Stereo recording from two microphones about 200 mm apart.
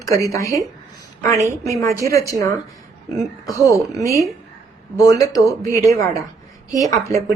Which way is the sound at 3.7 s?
15° right (ahead or behind).